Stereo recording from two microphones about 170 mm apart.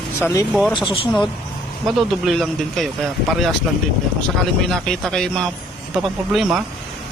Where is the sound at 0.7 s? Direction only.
30° left (ahead or behind).